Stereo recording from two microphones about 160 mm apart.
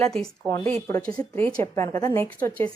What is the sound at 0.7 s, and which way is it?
Speech, 20° left (ahead or behind).